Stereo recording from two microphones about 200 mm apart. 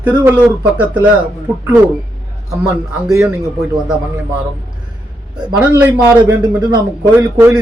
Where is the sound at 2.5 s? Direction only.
10° right (ahead or behind).